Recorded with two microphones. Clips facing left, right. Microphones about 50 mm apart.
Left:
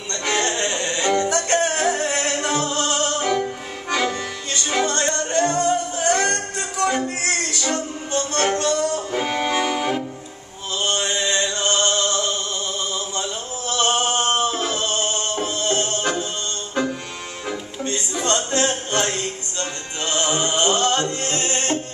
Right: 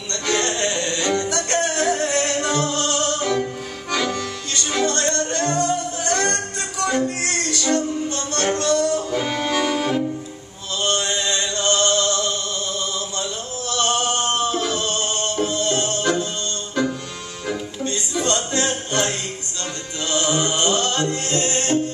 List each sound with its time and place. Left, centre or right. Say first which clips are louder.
0.1 s music: even; left
3.9 s accordion: left 1 dB; left
4.6 s music: even; left
9.1 s music: even; centre
10.8 s a sound: even; left
13.2 s male singing: even; left
17.8 s music: even; left